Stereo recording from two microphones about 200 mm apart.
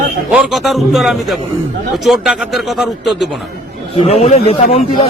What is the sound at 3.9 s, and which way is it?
Speech, 30° left (ahead or behind).